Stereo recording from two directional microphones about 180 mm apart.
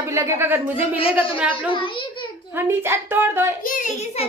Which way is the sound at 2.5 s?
10° right (ahead or behind).